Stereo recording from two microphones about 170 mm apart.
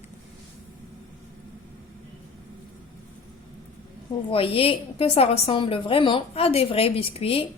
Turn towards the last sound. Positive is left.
turn(degrees=35)  # may be behind; listen again after turning